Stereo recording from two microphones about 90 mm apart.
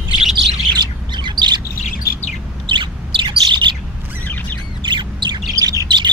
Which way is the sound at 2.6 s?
65° right (ahead or behind).